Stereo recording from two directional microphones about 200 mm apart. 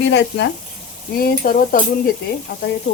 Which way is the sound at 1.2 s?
45° left (ahead or behind).